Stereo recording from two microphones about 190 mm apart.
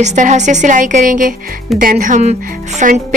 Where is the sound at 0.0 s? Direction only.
40° right (ahead or behind).